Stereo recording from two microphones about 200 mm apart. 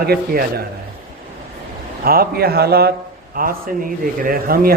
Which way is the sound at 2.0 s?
50° right (ahead or behind).